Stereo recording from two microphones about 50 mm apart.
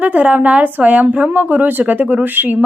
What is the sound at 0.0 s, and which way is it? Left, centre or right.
Speech, right.